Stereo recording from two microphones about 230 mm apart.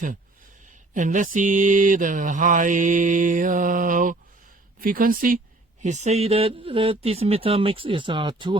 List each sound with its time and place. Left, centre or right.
0.9 s mantra: right
5.8 s speech: right